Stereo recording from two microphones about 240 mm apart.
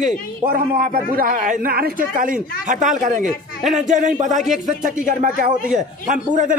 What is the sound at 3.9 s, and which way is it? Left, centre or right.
A man's voice, right.